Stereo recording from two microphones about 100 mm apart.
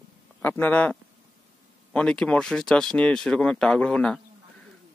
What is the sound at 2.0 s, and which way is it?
Speech, 10° left (ahead or behind).